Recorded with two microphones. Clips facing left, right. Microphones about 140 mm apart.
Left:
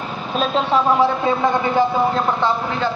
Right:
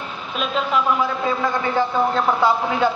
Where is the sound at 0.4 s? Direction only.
30° left (ahead or behind).